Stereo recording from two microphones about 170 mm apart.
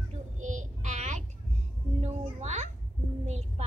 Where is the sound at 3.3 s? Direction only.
40° right (ahead or behind).